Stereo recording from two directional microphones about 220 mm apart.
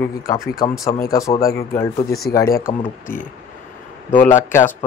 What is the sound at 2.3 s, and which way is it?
Speech, 45° left (ahead or behind).